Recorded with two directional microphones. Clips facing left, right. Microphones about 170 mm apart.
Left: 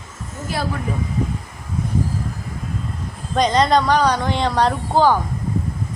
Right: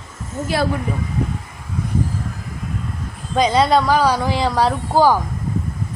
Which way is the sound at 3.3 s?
5° right (ahead or behind).